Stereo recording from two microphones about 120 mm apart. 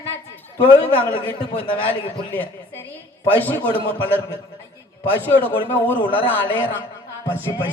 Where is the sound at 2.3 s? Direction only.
15° left (ahead or behind).